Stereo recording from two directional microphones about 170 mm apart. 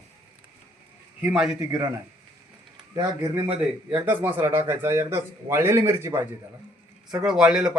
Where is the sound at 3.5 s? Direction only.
10° right (ahead or behind).